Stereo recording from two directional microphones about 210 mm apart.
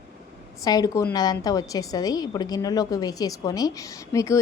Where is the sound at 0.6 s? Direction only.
20° left (ahead or behind).